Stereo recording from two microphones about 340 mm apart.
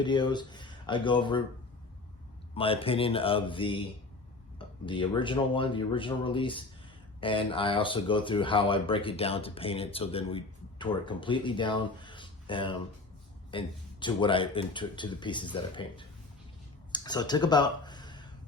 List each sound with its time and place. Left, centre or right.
0.0 s speech: centre
2.6 s speech: centre
16.9 s a sound: centre